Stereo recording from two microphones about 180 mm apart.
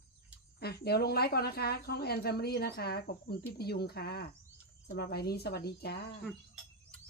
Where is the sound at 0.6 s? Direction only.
60° left (ahead or behind).